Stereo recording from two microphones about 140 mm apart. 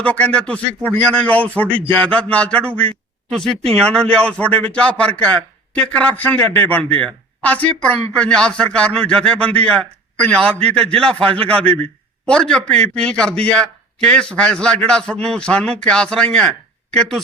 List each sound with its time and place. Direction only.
0.0 s a man's voice: 10° left (ahead or behind)